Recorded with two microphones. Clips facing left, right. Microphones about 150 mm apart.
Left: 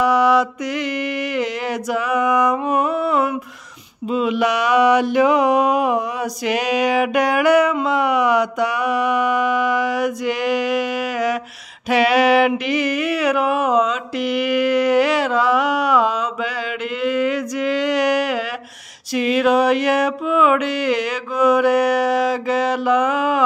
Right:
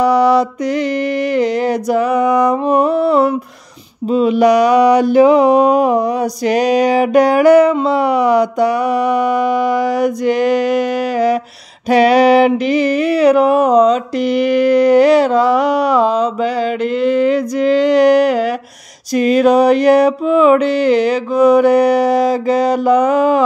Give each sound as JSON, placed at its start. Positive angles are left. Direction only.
{"t": 0.0, "sound": "mantra", "side_deg": -35}
{"t": 17.0, "sound": "a sound", "side_deg": -35}
{"t": 19.1, "sound": "mantra", "side_deg": -40}